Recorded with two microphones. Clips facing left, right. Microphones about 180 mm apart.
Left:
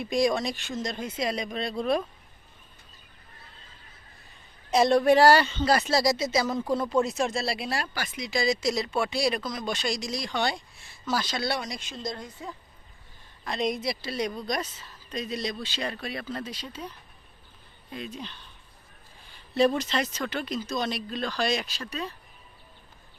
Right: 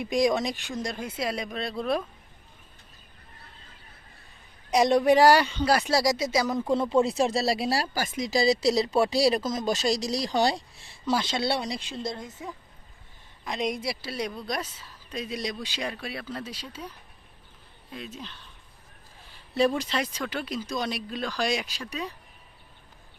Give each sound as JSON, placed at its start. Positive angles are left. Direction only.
{"t": 0.0, "sound": "speech", "side_deg": -15}
{"t": 4.7, "sound": "speech", "side_deg": -15}
{"t": 6.7, "sound": "speech", "side_deg": -25}
{"t": 11.0, "sound": "speech", "side_deg": -25}
{"t": 17.9, "sound": "speech", "side_deg": 0}